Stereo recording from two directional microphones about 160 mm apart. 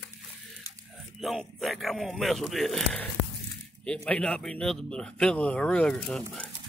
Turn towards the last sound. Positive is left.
turn(degrees=5)  # may be behind; listen again after turning